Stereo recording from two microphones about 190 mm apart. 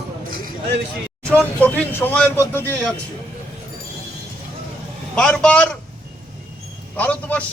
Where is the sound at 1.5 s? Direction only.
10° left (ahead or behind).